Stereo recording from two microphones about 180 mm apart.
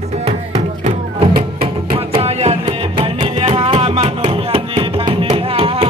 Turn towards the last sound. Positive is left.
turn(degrees=-30)  # may be behind; listen again after turning